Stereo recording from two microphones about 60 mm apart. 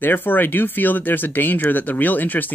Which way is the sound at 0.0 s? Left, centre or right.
Left.